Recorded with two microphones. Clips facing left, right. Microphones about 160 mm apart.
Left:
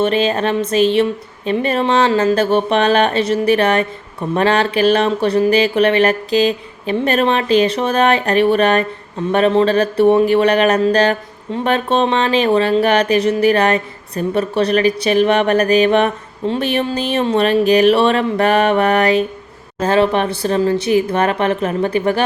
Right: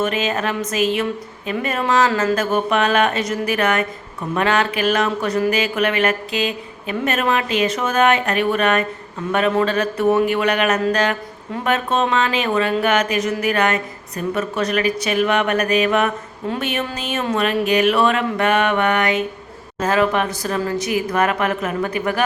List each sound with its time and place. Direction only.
0.0 s speech: 30° left (ahead or behind)